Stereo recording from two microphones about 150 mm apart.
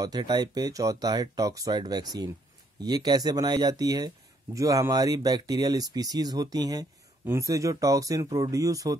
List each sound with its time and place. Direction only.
0.0 s speech: 30° right (ahead or behind)